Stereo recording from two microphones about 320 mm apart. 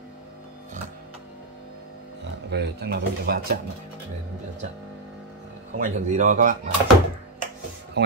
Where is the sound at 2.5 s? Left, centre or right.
Right.